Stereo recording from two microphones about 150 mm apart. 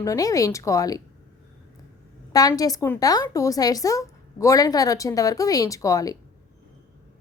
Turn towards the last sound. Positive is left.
turn(degrees=25)  # may be behind; listen again after turning